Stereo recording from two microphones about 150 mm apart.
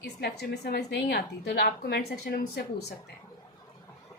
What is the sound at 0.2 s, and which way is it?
Speech, 90° left.